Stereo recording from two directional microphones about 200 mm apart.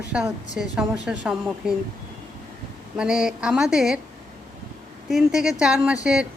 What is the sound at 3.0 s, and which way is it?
A woman's voice, 5° right (ahead or behind).